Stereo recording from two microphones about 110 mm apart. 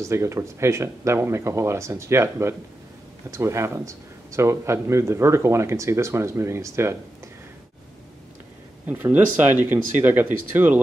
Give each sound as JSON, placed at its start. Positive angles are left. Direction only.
{"t": 0.0, "sound": "speech", "side_deg": -25}
{"t": 8.8, "sound": "speech", "side_deg": -15}